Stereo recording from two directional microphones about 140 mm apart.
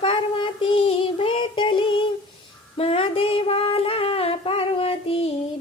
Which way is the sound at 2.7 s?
40° left (ahead or behind).